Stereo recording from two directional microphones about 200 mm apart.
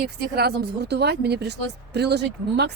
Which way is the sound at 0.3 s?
55° right (ahead or behind).